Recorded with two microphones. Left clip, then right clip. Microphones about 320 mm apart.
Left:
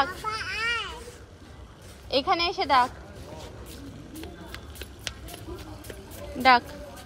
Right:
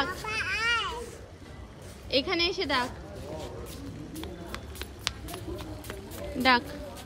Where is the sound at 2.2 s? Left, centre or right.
Centre.